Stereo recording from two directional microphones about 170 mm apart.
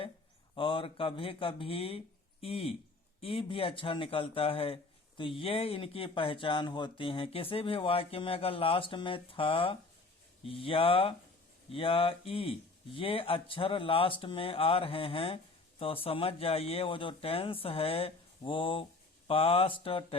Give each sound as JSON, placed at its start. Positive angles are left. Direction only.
{"t": 0.5, "sound": "speech", "side_deg": 30}